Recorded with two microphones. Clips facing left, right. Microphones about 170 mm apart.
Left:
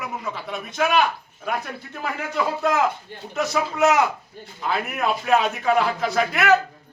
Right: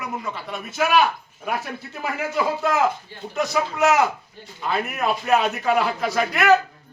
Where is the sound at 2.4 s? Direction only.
5° right (ahead or behind).